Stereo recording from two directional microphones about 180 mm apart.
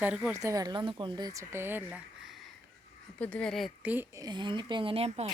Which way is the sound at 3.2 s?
5° left (ahead or behind).